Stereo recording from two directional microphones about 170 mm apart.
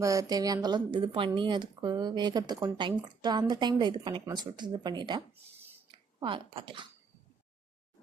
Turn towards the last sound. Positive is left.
turn(degrees=-30)  # may be behind; listen again after turning